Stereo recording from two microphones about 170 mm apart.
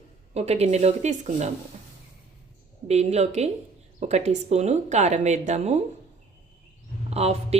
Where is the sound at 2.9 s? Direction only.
40° right (ahead or behind).